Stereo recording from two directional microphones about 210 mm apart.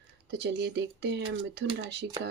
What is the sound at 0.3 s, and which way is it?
Speech, 55° right (ahead or behind).